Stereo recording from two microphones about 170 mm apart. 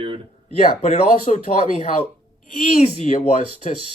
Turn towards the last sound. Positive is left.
turn(degrees=45)  # may be behind; listen again after turning